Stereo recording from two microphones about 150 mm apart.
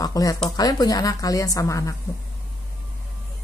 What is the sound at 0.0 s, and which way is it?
Speech, 25° left (ahead or behind).